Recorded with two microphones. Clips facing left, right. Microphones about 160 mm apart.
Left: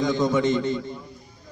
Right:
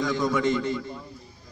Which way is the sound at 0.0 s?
20° left (ahead or behind).